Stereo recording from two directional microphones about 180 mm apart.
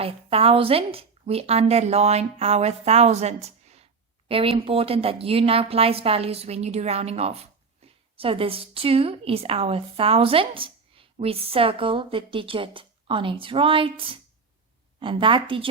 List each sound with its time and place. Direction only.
0.0 s a woman's voice: 30° right (ahead or behind)